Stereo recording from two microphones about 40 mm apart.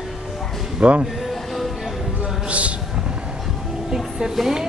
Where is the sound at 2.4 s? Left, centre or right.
Right.